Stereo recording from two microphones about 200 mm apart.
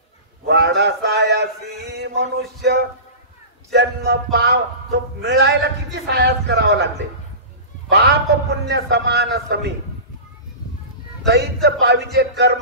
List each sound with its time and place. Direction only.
0.5 s a sound: 55° right (ahead or behind)
2.6 s a man's voice: 55° right (ahead or behind)
7.9 s a man's voice: 55° right (ahead or behind)
11.2 s a man's voice: 55° right (ahead or behind)